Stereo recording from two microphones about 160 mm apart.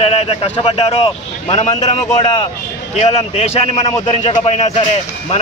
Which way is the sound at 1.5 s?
45° left (ahead or behind).